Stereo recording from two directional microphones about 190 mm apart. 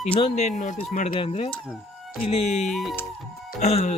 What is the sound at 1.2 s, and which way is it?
Speech, 30° left (ahead or behind).